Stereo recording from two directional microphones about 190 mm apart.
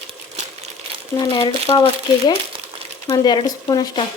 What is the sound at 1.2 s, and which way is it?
Speech, 25° left (ahead or behind).